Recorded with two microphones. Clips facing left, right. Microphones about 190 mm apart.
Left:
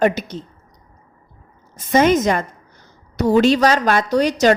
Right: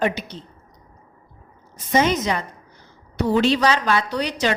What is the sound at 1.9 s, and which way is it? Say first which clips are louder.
A woman's voice: left 5 dB; 50° left (ahead or behind).